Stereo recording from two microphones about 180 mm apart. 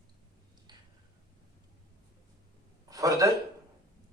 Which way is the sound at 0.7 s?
25° right (ahead or behind).